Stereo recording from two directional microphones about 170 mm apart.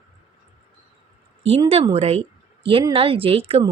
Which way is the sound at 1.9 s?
40° right (ahead or behind).